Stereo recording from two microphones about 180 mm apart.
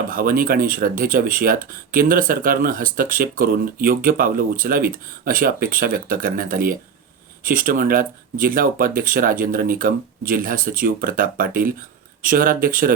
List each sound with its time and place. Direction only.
0.1 s speech: 50° right (ahead or behind)